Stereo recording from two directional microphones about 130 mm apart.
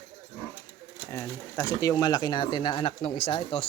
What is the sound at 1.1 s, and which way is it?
Speech, 20° left (ahead or behind).